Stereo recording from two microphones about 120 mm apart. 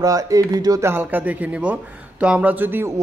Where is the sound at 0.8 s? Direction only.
20° right (ahead or behind).